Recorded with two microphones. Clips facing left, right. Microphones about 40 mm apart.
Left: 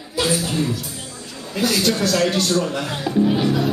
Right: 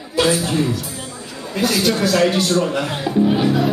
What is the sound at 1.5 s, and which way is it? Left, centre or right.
A man's voice, centre.